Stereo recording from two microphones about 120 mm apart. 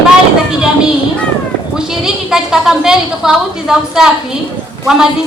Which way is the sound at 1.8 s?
5° right (ahead or behind).